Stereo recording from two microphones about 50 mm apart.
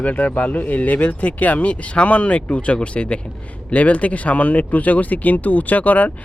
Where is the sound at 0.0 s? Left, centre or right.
Left.